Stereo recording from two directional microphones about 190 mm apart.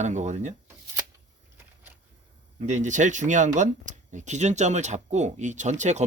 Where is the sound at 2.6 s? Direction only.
40° right (ahead or behind).